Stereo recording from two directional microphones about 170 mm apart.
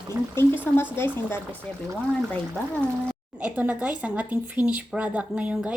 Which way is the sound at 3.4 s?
10° right (ahead or behind).